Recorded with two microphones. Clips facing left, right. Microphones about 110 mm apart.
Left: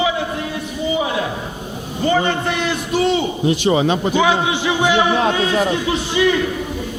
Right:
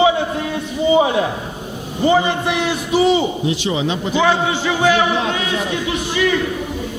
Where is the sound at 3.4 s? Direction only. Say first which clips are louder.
Left 4 dB; 50° left (ahead or behind).